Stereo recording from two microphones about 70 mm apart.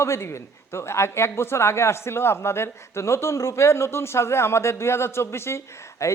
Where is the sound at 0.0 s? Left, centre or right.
Left.